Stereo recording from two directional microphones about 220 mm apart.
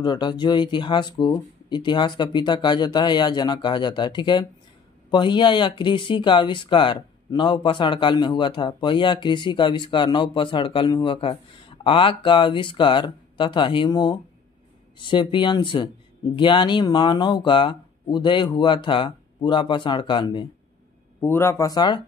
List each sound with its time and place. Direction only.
0.0 s speech: 20° left (ahead or behind)
21.2 s speech: 10° left (ahead or behind)